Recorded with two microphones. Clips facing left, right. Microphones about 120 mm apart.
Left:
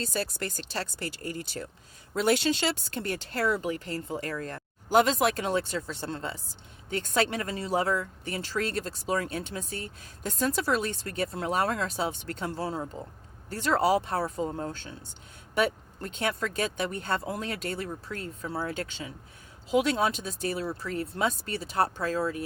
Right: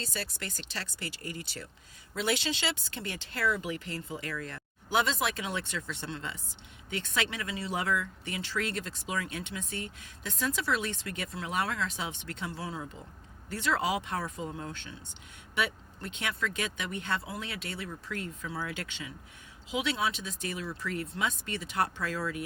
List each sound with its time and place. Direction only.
0.0 s speech: 45° left (ahead or behind)